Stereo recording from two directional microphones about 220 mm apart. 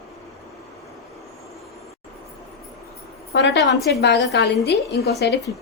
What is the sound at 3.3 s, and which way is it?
A woman's voice, 50° left (ahead or behind).